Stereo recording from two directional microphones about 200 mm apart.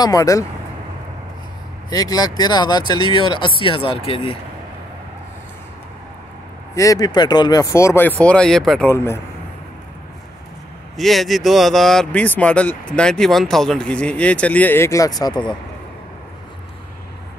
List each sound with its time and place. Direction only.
0.0 s speech: 15° left (ahead or behind)
1.9 s speech: 20° left (ahead or behind)
6.7 s speech: 15° left (ahead or behind)
11.0 s speech: centre (ahead or behind); by 15.5 s 20° left (ahead or behind)